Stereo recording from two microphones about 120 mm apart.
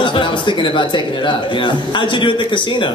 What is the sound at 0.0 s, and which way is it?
A man's voice, 45° left (ahead or behind).